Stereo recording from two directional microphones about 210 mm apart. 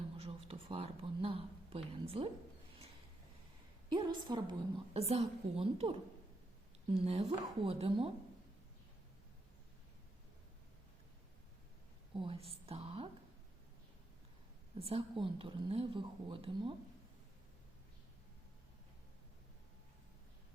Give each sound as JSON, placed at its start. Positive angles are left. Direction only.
{"t": 0.2, "sound": "speech", "side_deg": -25}
{"t": 3.8, "sound": "a woman's voice", "side_deg": -20}
{"t": 12.1, "sound": "a woman's voice", "side_deg": -25}
{"t": 14.8, "sound": "a woman's voice", "side_deg": -25}